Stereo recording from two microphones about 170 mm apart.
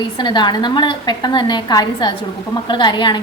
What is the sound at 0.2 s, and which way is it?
A woman's voice, 25° left (ahead or behind).